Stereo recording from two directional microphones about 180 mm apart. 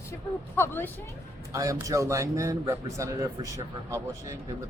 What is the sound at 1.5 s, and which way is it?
A man's voice, 15° right (ahead or behind).